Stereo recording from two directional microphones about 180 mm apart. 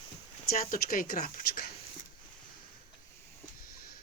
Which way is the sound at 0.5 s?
50° left (ahead or behind).